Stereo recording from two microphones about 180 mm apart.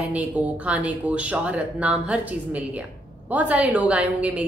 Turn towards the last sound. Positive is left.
turn(degrees=-5)  # may be behind; listen again after turning